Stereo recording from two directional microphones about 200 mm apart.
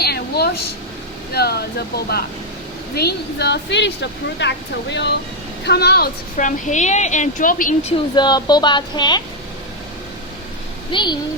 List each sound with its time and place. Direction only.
0.0 s a sound: 50° left (ahead or behind)
1.3 s speech: 50° left (ahead or behind)
2.9 s a woman's voice: 55° left (ahead or behind)
8.1 s speech: 20° left (ahead or behind)
10.9 s speech: 20° left (ahead or behind)